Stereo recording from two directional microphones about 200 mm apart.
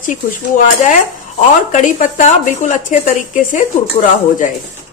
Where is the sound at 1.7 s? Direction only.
40° left (ahead or behind).